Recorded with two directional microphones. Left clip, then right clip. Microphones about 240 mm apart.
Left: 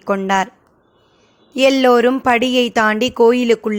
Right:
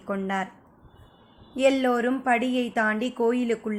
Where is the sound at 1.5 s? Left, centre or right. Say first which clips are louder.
Left 10 dB; left.